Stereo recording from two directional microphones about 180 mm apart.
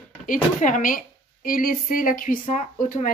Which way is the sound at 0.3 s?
45° left (ahead or behind).